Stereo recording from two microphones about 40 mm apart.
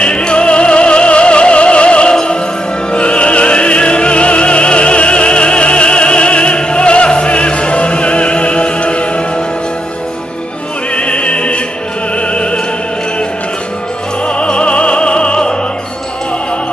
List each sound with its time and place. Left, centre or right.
0.0 s music: left
2.9 s opera: left
11.0 s opera: left
12.2 s music: left
14.2 s music: left